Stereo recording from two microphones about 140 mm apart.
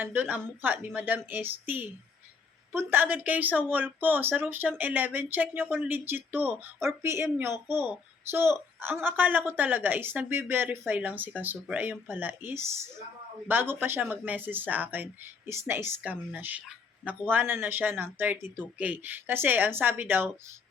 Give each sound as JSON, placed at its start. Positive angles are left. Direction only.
{"t": 0.0, "sound": "a woman's voice", "side_deg": -15}